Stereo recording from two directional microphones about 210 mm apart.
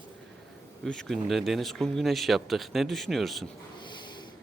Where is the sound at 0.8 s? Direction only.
Centre (ahead or behind).